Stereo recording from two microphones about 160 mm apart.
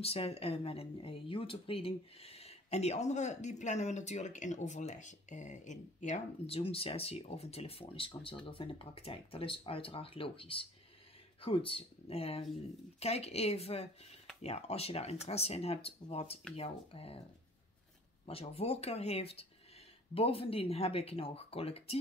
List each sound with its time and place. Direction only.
0.0 s speech: 40° left (ahead or behind)
18.2 s speech: 35° left (ahead or behind)